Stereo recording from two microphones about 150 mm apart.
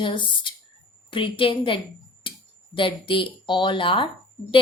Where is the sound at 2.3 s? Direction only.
35° left (ahead or behind).